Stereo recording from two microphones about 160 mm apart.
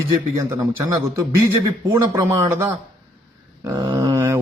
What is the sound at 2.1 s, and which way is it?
A man's voice, 15° right (ahead or behind).